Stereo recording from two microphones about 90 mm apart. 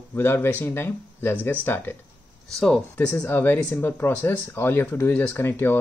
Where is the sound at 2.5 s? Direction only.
5° left (ahead or behind); by 5.8 s 25° left (ahead or behind).